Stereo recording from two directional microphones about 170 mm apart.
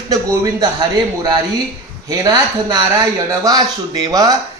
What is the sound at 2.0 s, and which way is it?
A man's voice, 20° right (ahead or behind).